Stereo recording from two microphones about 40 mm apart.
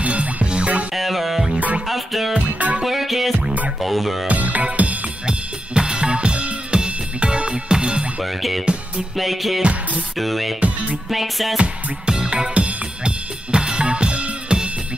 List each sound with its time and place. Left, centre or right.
0.0 s music: right
0.9 s music: centre
2.3 s music: right
2.8 s music: centre
4.3 s music: right
5.8 s music: right
8.2 s music: centre
9.6 s music: right
10.1 s speech: centre
10.6 s music: right
11.1 s music: centre
12.1 s music: centre
12.5 s music: right
13.5 s drum kit: right